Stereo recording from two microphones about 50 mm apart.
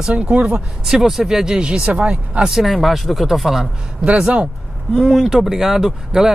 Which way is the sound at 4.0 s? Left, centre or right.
Centre.